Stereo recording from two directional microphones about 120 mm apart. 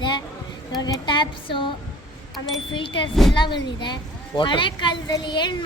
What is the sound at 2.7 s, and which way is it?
A child's voice, 45° left (ahead or behind).